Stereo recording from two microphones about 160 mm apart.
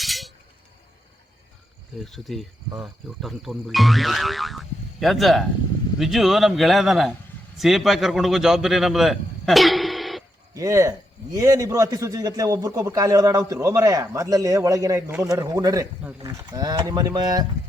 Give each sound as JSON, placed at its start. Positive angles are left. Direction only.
{"t": 0.0, "sound": "chink", "side_deg": 0}
{"t": 2.0, "sound": "speech", "side_deg": 0}
{"t": 2.6, "sound": "a man's voice", "side_deg": -25}
{"t": 3.2, "sound": "a man's voice", "side_deg": 0}
{"t": 10.5, "sound": "a man's voice", "side_deg": -20}